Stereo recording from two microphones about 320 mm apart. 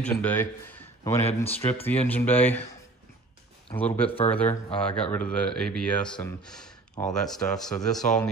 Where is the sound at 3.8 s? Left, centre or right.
Centre.